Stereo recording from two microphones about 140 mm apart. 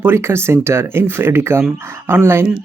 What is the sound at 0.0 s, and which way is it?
Speech, 20° right (ahead or behind).